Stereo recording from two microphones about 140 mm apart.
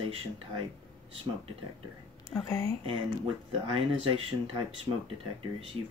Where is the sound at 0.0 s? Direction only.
40° right (ahead or behind).